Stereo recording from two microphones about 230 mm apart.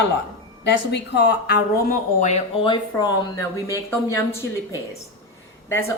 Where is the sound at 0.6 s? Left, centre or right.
Left; by 3.5 s centre.